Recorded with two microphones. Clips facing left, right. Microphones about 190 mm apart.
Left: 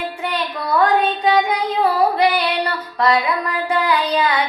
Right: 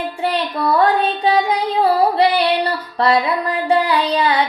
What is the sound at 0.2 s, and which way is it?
Child singing, 30° right (ahead or behind).